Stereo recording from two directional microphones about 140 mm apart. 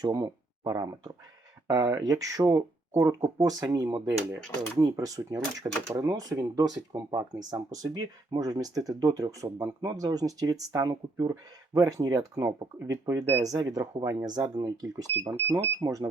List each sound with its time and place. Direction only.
0.0 s speech: 25° right (ahead or behind)